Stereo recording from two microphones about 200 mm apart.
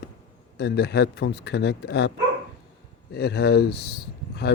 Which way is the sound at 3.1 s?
55° left (ahead or behind).